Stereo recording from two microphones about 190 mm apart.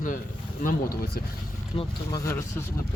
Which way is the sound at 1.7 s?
20° left (ahead or behind).